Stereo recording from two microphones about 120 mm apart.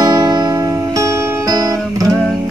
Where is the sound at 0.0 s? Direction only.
30° right (ahead or behind).